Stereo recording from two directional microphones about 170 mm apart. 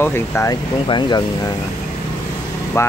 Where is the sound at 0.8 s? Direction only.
25° left (ahead or behind).